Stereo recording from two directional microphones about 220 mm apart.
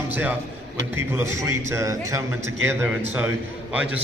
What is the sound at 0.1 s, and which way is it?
A man's voice, 10° right (ahead or behind).